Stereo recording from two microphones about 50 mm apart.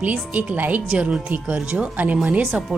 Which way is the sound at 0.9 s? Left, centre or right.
Right.